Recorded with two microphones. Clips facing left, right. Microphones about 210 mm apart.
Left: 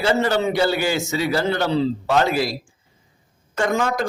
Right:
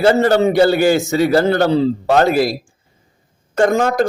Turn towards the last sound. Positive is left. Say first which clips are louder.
# right 7 dB
turn(degrees=-45)  # may be behind; listen again after turning